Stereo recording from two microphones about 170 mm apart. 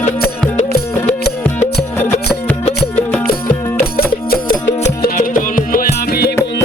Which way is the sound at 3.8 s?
60° left (ahead or behind).